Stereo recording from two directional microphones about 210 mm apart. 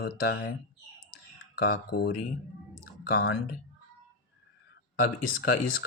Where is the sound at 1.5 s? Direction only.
45° left (ahead or behind).